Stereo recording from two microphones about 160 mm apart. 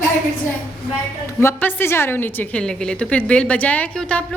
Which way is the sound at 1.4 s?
15° left (ahead or behind).